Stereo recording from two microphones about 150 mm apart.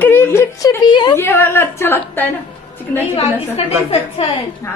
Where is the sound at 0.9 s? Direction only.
30° left (ahead or behind).